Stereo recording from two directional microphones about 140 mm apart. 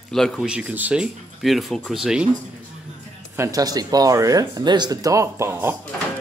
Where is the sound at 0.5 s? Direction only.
10° right (ahead or behind).